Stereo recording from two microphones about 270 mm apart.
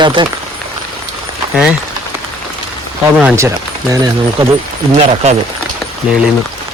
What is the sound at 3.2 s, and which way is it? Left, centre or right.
Speech, centre.